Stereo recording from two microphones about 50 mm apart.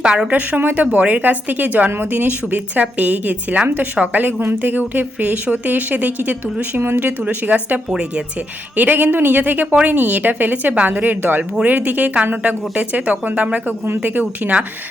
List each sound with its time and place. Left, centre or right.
0.0 s a woman's voice: centre
0.3 s a woman's voice: right
13.8 s a woman's voice: right